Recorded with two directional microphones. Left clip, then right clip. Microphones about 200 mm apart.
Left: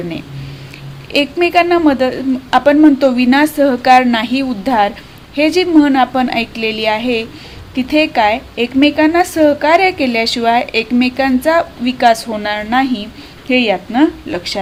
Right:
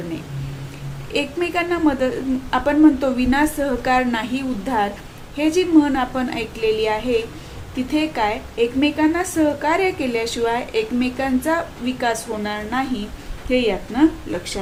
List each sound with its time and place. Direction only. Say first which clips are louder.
1.1 s a woman's voice: left 10 dB; 45° left (ahead or behind)